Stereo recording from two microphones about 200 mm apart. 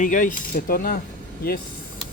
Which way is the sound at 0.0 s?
40° left (ahead or behind).